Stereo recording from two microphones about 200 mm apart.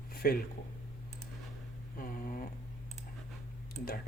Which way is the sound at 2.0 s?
45° left (ahead or behind).